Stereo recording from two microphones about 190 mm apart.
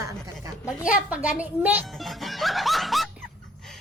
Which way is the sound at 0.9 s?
5° right (ahead or behind).